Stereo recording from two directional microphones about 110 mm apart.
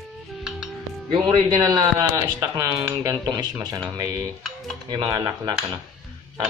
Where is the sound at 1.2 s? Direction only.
40° right (ahead or behind).